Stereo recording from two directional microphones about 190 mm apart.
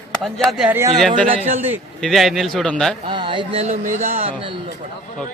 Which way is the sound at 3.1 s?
25° right (ahead or behind).